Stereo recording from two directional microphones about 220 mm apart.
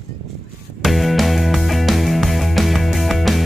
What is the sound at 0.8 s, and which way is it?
Music, centre (ahead or behind).